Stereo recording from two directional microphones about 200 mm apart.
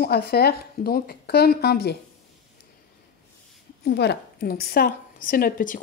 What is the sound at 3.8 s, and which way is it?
A woman's voice, 55° left (ahead or behind).